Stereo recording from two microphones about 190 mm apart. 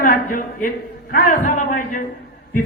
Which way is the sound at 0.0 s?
45° left (ahead or behind).